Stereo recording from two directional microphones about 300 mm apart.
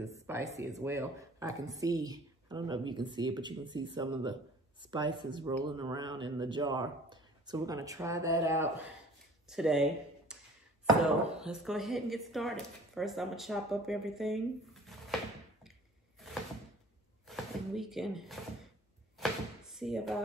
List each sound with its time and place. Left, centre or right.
0.0 s speech: centre
11.3 s speech: centre
17.3 s a sound: centre
19.7 s speech: centre